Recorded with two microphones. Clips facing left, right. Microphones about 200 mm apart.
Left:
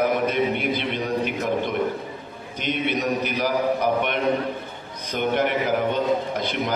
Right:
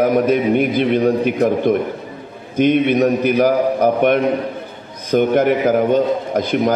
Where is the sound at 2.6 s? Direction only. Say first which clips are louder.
Right 12 dB; 50° right (ahead or behind).